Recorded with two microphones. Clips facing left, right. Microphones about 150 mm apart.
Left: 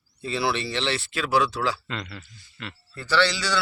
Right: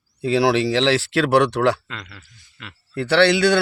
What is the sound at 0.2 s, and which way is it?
Speech, 90° right.